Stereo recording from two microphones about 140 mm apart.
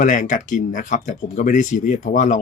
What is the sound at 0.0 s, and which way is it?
Speech, 65° left (ahead or behind).